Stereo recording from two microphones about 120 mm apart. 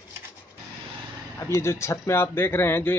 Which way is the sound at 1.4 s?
25° left (ahead or behind).